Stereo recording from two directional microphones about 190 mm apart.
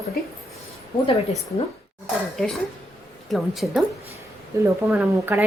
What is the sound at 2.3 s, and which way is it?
A woman's voice, centre (ahead or behind).